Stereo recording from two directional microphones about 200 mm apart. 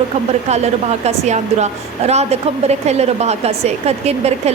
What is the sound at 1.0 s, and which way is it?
A woman's voice, 35° right (ahead or behind).